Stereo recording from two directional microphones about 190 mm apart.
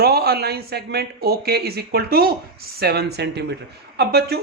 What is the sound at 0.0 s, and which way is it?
Speech, 55° right (ahead or behind).